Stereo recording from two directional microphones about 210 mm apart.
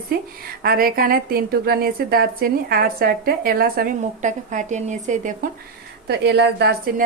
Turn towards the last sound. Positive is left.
turn(degrees=-50)  # may be behind; listen again after turning